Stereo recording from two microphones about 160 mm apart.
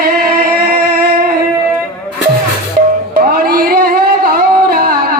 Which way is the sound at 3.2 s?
70° right (ahead or behind).